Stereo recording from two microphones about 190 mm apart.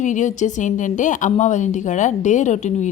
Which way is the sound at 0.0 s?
40° left (ahead or behind).